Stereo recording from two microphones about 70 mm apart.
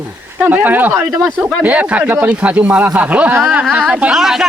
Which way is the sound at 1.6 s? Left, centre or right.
Centre.